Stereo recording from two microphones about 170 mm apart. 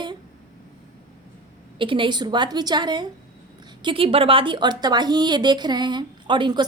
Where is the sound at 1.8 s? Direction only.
30° right (ahead or behind).